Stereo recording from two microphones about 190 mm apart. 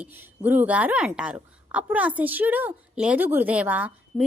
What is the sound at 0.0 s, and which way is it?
A woman's voice, 10° right (ahead or behind).